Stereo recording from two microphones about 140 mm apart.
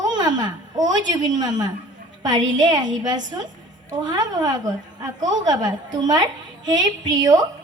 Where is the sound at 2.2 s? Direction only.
30° right (ahead or behind).